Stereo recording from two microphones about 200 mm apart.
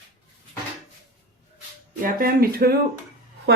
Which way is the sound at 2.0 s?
45° right (ahead or behind).